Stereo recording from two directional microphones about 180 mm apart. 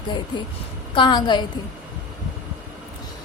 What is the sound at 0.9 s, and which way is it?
Speech, 25° left (ahead or behind).